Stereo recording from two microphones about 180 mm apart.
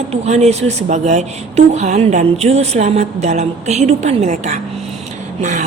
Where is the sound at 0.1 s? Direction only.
35° right (ahead or behind).